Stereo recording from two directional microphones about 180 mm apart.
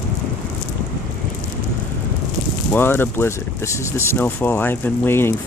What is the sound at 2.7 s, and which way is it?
Speech, 10° left (ahead or behind).